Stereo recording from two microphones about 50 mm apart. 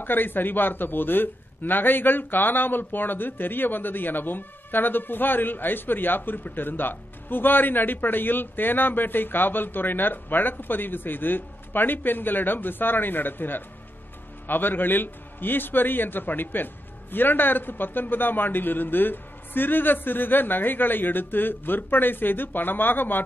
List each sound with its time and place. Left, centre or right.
0.0 s a man's voice: left